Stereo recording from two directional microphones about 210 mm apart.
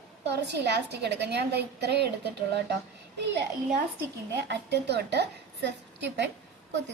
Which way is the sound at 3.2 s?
55° right (ahead or behind).